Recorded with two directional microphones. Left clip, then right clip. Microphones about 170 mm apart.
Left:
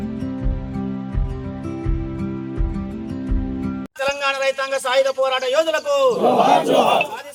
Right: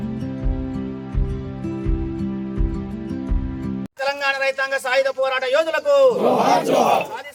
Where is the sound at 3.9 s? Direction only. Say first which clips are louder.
Even; 50° left (ahead or behind).